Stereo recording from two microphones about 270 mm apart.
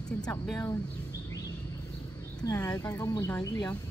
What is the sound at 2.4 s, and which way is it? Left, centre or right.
Speech, centre.